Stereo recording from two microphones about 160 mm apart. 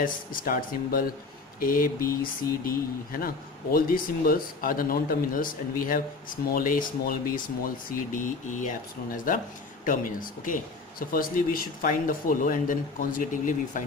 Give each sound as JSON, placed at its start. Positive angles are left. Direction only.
{"t": 0.0, "sound": "speech", "side_deg": 60}